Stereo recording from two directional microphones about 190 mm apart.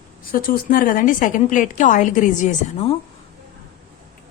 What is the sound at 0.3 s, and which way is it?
A woman's voice, 50° left (ahead or behind).